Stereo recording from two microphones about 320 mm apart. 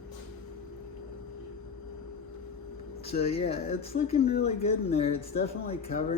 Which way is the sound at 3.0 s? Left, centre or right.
Centre.